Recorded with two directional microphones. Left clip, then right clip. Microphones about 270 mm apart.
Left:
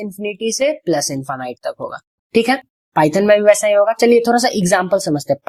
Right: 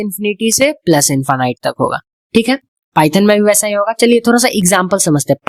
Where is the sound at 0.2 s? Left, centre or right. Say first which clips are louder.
Right 5 dB; right.